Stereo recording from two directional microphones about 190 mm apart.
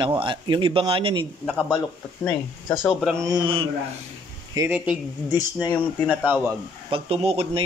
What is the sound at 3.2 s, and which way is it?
Speech, 20° right (ahead or behind).